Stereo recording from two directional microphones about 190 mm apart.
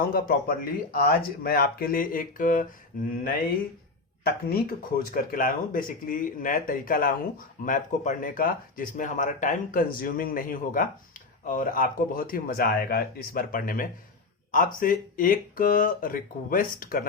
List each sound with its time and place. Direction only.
0.1 s speech: 50° left (ahead or behind)
4.2 s speech: 55° left (ahead or behind)